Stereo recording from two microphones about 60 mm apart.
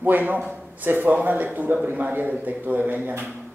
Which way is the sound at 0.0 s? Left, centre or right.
Right.